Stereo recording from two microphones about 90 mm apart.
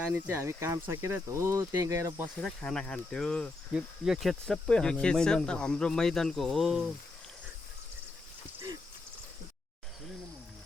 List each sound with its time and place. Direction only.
0.3 s speech: 35° right (ahead or behind)
2.4 s speech: 5° left (ahead or behind)
3.7 s speech: 5° right (ahead or behind)